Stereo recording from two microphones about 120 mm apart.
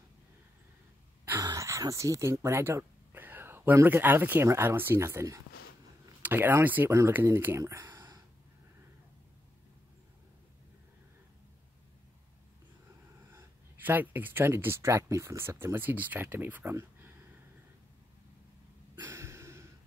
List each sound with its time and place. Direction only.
1.4 s speech: 25° right (ahead or behind)
13.3 s speech: 15° right (ahead or behind)
18.9 s a sound: 25° right (ahead or behind)